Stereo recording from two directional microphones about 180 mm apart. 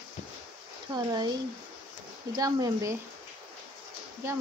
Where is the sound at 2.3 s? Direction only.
20° right (ahead or behind).